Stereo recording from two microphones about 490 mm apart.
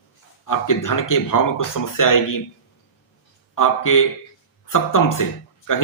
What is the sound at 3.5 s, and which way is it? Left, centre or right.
A man's voice, left.